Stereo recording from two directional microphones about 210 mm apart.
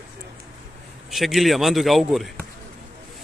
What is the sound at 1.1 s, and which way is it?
Speech, centre (ahead or behind).